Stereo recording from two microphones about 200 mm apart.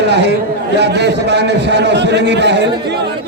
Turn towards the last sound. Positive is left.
turn(degrees=-55)  # may be behind; listen again after turning